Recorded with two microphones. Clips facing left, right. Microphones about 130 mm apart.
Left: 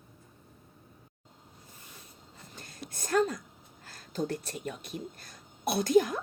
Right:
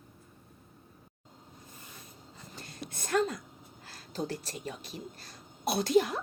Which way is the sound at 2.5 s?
45° left (ahead or behind).